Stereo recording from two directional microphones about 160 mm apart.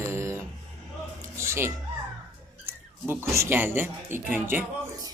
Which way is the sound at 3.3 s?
15° right (ahead or behind).